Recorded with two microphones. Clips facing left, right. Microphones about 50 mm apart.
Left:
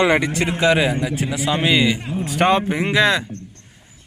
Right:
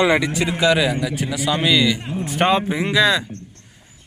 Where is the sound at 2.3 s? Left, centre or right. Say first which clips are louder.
Left 1 dB; left.